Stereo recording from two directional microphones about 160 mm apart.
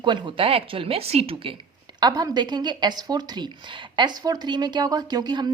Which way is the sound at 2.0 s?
25° right (ahead or behind).